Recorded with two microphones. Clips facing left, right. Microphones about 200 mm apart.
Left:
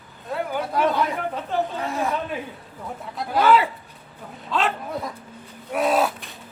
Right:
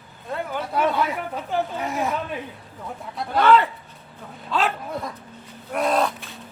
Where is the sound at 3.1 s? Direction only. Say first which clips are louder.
Right 1 dB; 5° left (ahead or behind).